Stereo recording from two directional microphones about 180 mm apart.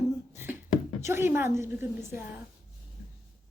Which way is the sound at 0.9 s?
15° right (ahead or behind).